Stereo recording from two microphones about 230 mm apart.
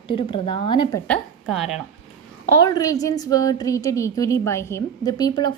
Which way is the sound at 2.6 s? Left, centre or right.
Centre.